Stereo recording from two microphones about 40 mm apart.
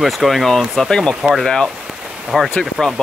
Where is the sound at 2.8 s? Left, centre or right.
Centre.